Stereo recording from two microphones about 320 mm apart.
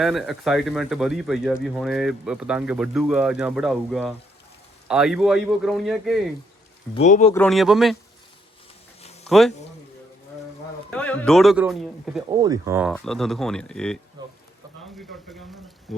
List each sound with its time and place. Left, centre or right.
0.0 s speech: centre
6.9 s speech: left
7.3 s speech: centre
10.9 s speech: centre